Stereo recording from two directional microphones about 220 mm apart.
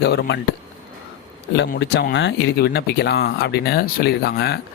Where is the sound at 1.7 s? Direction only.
45° left (ahead or behind).